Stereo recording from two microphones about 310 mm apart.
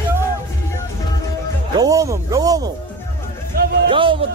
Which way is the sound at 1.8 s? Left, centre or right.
Centre.